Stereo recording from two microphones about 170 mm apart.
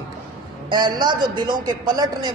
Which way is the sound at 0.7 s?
25° right (ahead or behind).